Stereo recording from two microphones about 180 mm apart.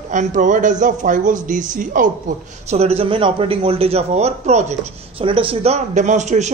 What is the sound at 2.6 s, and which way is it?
A man's voice, 35° right (ahead or behind).